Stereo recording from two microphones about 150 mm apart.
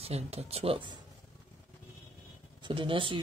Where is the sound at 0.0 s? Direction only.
45° right (ahead or behind).